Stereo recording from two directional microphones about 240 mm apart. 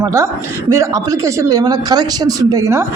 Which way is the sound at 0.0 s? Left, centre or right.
Centre.